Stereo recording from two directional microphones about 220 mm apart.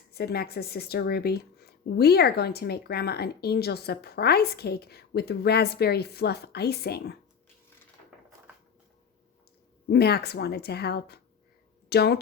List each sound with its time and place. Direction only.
0.1 s speech: 45° left (ahead or behind)
9.9 s speech: 45° left (ahead or behind)